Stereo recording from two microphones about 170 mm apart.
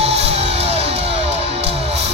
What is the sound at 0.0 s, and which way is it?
Music, 35° right (ahead or behind).